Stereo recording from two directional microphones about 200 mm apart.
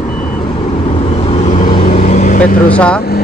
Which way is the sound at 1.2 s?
35° left (ahead or behind).